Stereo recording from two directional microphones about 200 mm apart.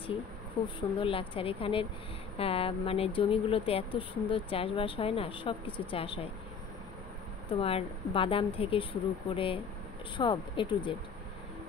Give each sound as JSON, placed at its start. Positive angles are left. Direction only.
{"t": 0.7, "sound": "speech", "side_deg": 25}
{"t": 7.5, "sound": "speech", "side_deg": 30}